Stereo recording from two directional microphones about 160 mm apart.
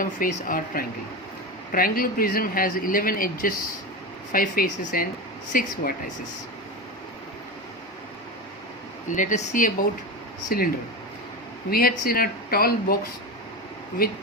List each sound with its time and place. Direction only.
0.0 s speech: 60° left (ahead or behind)
9.0 s speech: 55° left (ahead or behind)
10.5 s speech: 65° left (ahead or behind)
11.7 s speech: 70° left (ahead or behind)
14.0 s speech: 70° left (ahead or behind)